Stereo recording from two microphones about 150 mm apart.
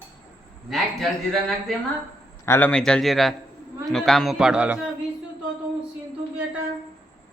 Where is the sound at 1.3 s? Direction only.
Centre (ahead or behind).